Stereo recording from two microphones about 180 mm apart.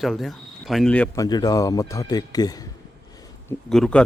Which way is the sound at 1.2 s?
20° left (ahead or behind).